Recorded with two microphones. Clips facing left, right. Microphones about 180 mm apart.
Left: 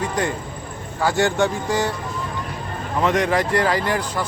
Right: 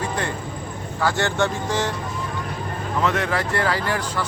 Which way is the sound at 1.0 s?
15° left (ahead or behind).